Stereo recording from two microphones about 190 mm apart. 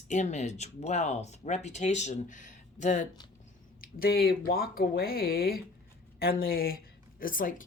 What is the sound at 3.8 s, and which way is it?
Speech, 50° left (ahead or behind).